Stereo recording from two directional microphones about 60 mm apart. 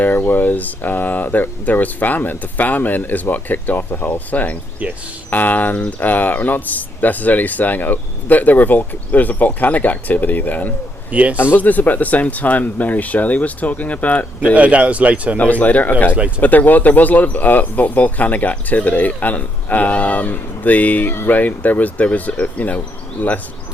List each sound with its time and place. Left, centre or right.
0.0 s speech: left
11.1 s speech: right
11.5 s speech: left
14.5 s speech: right
15.4 s speech: left